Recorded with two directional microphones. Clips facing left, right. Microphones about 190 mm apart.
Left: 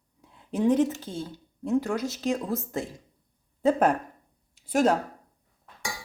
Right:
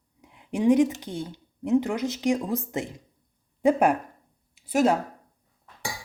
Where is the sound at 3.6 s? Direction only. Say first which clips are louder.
Right 2 dB; 10° right (ahead or behind).